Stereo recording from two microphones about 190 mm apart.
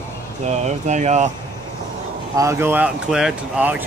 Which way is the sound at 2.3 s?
15° right (ahead or behind).